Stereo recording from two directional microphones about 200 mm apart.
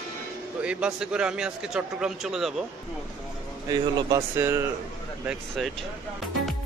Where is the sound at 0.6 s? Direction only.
5° right (ahead or behind).